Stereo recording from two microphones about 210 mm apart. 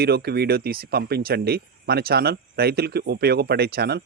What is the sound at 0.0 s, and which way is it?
Speech, 50° right (ahead or behind).